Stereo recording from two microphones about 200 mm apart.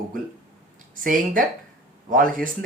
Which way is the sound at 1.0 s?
45° right (ahead or behind).